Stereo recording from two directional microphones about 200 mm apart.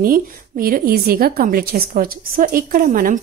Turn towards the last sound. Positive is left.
turn(degrees=-45)  # may be behind; listen again after turning